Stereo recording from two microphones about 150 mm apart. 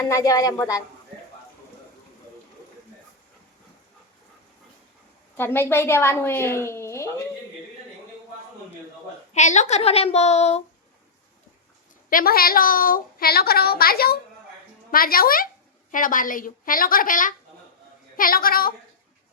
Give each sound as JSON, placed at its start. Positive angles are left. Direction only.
{"t": 0.0, "sound": "speech", "side_deg": 25}
{"t": 5.4, "sound": "a woman's voice", "side_deg": 15}
{"t": 9.3, "sound": "a woman's voice", "side_deg": 50}
{"t": 12.1, "sound": "a woman's voice", "side_deg": 80}
{"t": 14.8, "sound": "a woman's voice", "side_deg": 75}
{"t": 15.9, "sound": "a woman's voice", "side_deg": 65}
{"t": 18.2, "sound": "a woman's voice", "side_deg": 75}